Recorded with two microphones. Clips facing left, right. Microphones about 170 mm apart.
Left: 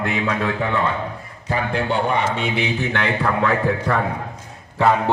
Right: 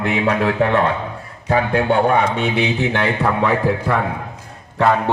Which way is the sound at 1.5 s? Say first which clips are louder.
Right 5 dB; 55° right (ahead or behind).